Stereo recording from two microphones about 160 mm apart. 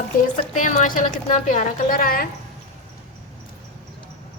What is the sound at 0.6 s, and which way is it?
A woman's voice, 55° left (ahead or behind).